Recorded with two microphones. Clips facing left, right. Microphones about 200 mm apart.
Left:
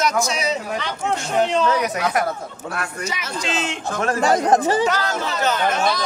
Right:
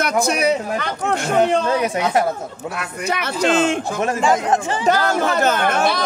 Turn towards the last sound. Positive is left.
turn(degrees=-55)  # may be behind; listen again after turning